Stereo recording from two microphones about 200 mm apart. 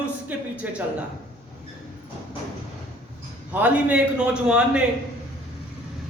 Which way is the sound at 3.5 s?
10° right (ahead or behind).